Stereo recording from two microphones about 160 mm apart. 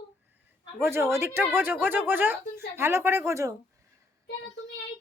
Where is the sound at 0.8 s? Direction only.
15° right (ahead or behind).